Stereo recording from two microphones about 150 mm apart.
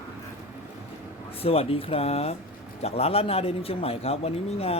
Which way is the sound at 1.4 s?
40° left (ahead or behind).